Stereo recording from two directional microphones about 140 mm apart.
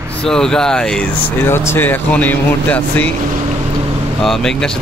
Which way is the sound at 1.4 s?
15° left (ahead or behind).